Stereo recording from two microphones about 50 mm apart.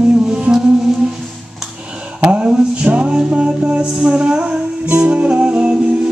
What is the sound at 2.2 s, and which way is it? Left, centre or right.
Music, centre.